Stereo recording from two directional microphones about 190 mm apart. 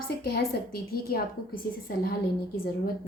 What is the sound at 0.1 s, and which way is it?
A woman's voice, 55° left (ahead or behind).